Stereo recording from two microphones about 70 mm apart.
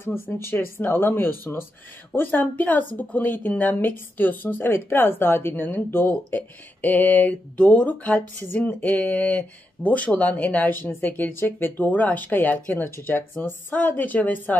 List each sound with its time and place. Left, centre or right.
0.0 s speech: left